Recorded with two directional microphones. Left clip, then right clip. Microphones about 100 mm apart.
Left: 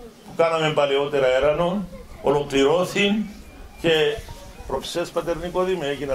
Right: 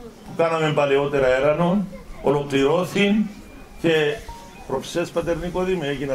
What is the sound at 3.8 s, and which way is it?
A man's voice, 20° left (ahead or behind).